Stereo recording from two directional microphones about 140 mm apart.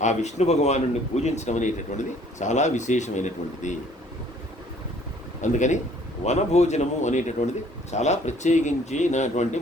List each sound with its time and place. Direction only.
0.0 s a man's voice: 55° left (ahead or behind)
5.4 s a man's voice: 60° left (ahead or behind)